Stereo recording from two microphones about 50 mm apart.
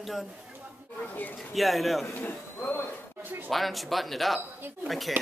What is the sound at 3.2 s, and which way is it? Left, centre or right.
Speech, right.